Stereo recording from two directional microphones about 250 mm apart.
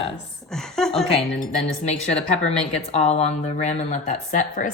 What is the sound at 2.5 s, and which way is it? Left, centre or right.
Speech, left.